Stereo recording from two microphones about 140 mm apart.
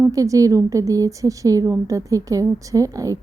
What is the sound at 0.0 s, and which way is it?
A woman's voice, 25° right (ahead or behind).